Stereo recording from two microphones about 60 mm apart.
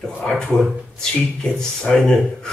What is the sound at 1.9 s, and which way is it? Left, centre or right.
Speech, centre.